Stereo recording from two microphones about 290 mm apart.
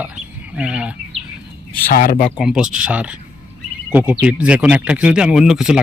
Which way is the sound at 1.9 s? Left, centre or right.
Left.